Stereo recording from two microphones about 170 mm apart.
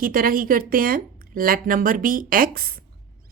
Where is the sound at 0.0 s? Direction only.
55° right (ahead or behind).